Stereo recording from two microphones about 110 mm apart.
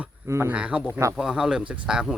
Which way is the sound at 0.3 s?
25° right (ahead or behind).